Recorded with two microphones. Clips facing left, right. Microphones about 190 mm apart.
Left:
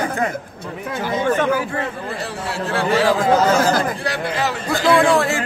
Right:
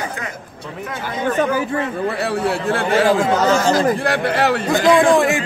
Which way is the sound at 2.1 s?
65° right (ahead or behind).